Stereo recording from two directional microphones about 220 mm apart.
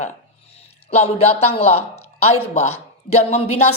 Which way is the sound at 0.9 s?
30° left (ahead or behind).